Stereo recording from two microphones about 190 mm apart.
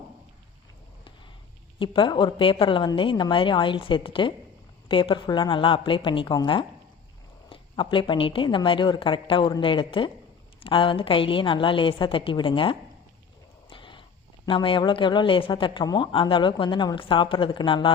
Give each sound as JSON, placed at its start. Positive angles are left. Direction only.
{"t": 1.8, "sound": "a woman's voice", "side_deg": 25}
{"t": 13.7, "sound": "a sound", "side_deg": 25}
{"t": 14.4, "sound": "a woman's voice", "side_deg": 25}